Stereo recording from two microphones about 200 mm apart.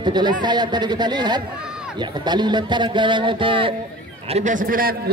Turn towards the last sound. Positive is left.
turn(degrees=-45)  # may be behind; listen again after turning